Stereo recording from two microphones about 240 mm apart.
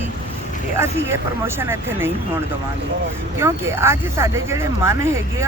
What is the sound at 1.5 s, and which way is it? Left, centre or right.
Speech, centre.